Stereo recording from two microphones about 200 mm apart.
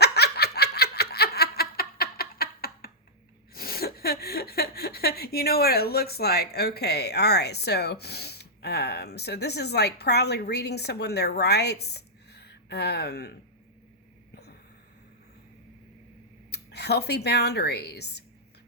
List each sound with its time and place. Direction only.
0.0 s giggle: 55° left (ahead or behind)
3.5 s speech: 50° left (ahead or behind)
16.5 s speech: 55° left (ahead or behind)